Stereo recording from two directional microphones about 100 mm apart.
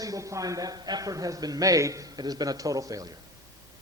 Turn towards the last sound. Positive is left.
turn(degrees=-35)  # may be behind; listen again after turning